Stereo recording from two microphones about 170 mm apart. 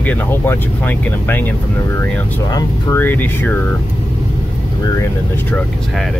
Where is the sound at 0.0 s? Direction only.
10° left (ahead or behind).